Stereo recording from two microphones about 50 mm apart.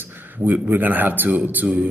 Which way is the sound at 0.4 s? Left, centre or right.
Right.